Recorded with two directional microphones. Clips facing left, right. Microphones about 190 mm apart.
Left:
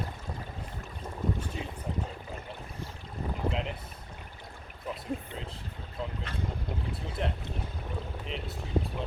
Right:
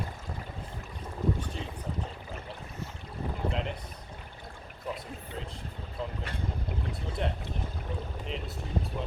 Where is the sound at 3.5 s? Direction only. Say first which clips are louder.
Even; centre (ahead or behind).